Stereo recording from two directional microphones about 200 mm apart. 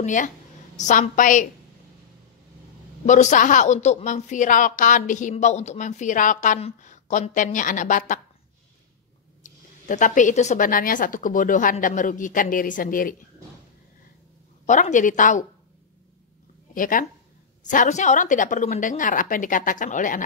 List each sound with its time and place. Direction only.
0.0 s a woman's voice: 40° left (ahead or behind)
3.1 s a woman's voice: 35° left (ahead or behind)
9.4 s a woman's voice: 40° left (ahead or behind)
14.7 s a woman's voice: 40° left (ahead or behind)
16.7 s a woman's voice: 45° left (ahead or behind)